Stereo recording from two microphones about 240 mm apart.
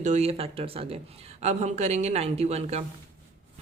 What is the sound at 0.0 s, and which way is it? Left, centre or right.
A woman's voice, right.